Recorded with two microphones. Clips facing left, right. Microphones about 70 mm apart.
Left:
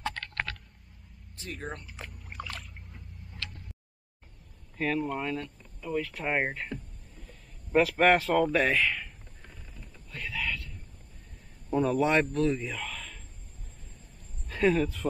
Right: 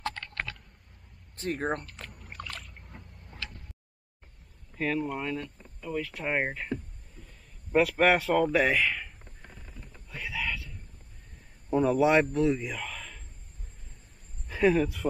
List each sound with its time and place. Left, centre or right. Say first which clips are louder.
1.3 s speech: right 8 dB; right
1.9 s rowboat: left 1 dB; centre
2.1 s a sound: left 1 dB; centre
4.7 s speech: even; centre
9.4 s a sound: right 2 dB; centre
11.7 s a man's voice: right 2 dB; centre
14.5 s speech: right 1 dB; centre